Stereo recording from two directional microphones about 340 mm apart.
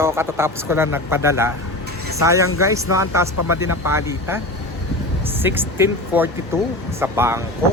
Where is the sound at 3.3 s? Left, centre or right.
Left.